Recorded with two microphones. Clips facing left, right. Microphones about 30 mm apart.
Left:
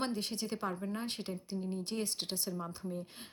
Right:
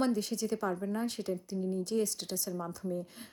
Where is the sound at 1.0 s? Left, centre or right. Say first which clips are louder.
Right 5 dB; left.